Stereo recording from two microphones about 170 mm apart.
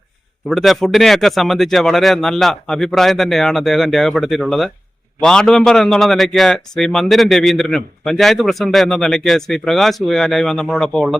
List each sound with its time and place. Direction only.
0.4 s a man's voice: centre (ahead or behind)